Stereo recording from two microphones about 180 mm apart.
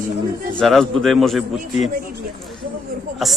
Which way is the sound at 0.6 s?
Centre (ahead or behind).